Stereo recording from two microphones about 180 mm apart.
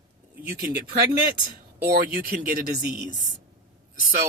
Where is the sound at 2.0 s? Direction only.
55° right (ahead or behind).